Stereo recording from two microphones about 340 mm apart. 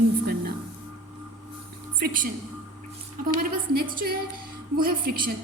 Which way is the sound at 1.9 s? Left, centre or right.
Right.